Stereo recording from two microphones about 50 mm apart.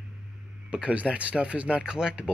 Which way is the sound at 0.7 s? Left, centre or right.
Right.